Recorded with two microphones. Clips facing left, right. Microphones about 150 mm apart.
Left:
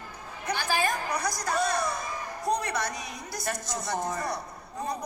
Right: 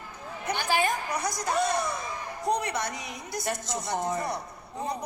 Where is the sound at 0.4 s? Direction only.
20° right (ahead or behind).